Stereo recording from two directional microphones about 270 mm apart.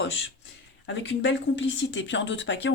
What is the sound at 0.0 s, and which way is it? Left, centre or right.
Speech, left.